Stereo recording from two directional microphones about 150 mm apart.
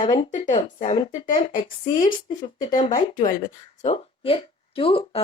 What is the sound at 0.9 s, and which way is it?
Speech, 35° left (ahead or behind).